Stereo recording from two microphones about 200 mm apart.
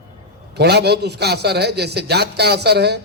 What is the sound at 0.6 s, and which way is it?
A man's voice, 55° right (ahead or behind).